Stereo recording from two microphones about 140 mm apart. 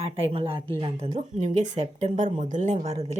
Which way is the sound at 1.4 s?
60° right (ahead or behind).